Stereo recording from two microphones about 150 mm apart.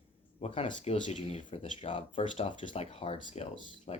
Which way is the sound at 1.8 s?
35° left (ahead or behind).